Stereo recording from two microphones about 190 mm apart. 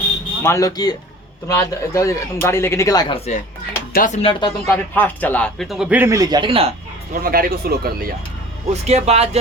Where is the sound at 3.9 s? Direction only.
45° left (ahead or behind).